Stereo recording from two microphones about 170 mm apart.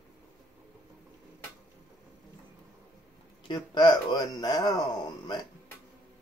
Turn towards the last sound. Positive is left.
turn(degrees=20)  # may be behind; listen again after turning